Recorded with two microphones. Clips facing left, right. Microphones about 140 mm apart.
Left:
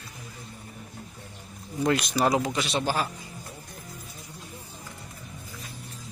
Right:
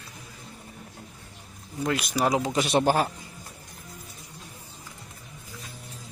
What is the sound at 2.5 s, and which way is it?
Speech, 50° right (ahead or behind).